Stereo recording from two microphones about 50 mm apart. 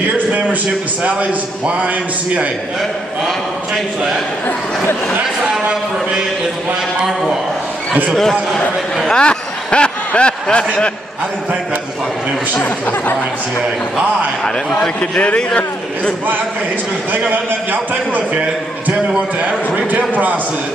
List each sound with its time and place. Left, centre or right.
1.0 s a man's voice: right
8.2 s a man's voice: centre
9.2 s a sound: centre
12.5 s speech: left
15.0 s a man's voice: left
17.5 s a man's voice: right